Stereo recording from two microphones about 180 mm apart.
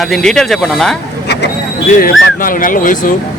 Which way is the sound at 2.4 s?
50° left (ahead or behind).